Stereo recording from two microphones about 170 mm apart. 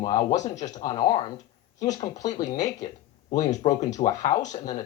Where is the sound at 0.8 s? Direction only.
25° left (ahead or behind).